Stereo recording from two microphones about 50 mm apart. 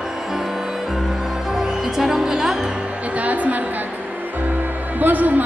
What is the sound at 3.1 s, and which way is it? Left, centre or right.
Music, right.